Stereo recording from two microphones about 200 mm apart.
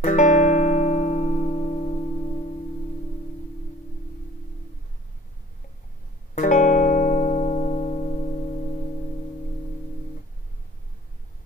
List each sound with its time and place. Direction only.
0.0 s music: 40° left (ahead or behind)
6.3 s music: 40° left (ahead or behind)